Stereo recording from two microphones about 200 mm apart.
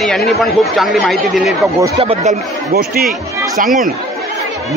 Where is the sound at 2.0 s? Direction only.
30° right (ahead or behind).